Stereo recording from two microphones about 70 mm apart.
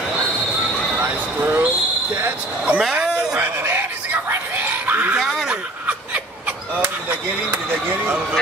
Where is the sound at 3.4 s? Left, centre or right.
Right.